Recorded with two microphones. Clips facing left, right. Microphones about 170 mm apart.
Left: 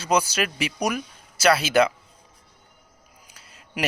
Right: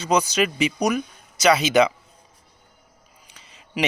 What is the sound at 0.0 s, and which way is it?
Speech, 5° left (ahead or behind).